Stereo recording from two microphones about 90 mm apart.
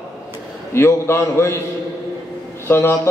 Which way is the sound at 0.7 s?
30° left (ahead or behind).